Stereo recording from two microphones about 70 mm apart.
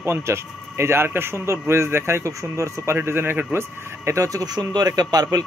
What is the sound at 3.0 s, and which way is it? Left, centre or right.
Speech, right.